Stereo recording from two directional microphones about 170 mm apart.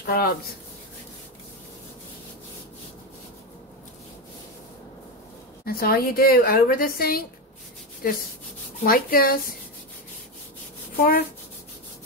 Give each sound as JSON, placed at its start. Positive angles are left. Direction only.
{"t": 0.0, "sound": "a woman's voice", "side_deg": 60}
{"t": 5.7, "sound": "a woman's voice", "side_deg": 60}
{"t": 8.8, "sound": "a woman's voice", "side_deg": 60}
{"t": 11.0, "sound": "a woman's voice", "side_deg": 65}